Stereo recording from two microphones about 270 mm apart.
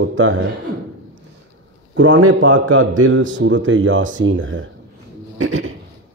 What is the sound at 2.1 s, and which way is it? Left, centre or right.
Speech, right.